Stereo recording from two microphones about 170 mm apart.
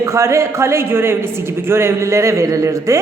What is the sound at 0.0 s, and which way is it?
A woman's voice, 15° right (ahead or behind).